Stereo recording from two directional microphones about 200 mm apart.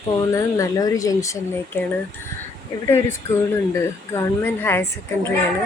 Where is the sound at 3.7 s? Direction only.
15° left (ahead or behind).